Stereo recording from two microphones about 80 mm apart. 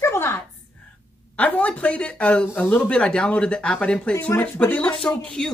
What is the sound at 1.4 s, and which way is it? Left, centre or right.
Speech, centre.